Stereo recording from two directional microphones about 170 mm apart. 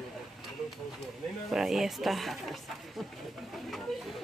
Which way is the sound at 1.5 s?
Centre (ahead or behind).